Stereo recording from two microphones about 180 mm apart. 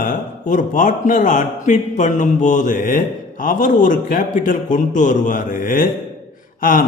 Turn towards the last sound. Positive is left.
turn(degrees=50)  # may be behind; listen again after turning